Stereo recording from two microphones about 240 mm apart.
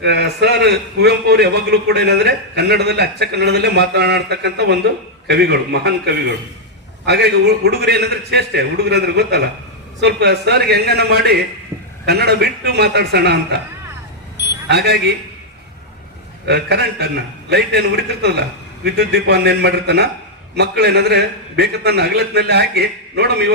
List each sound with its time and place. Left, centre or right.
0.0 s a man's voice: right
14.7 s a man's voice: right
16.5 s a man's voice: right